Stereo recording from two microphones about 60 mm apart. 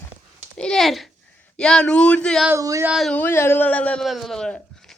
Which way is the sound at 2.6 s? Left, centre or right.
Right.